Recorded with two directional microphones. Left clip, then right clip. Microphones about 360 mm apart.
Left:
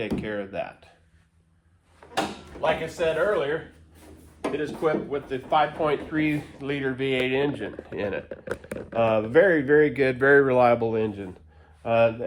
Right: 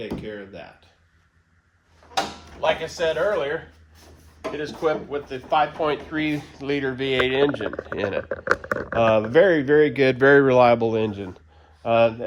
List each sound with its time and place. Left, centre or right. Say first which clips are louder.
0.0 s speech: left 3 dB; centre
2.6 s speech: right 2 dB; right
4.5 s speech: right 2 dB; right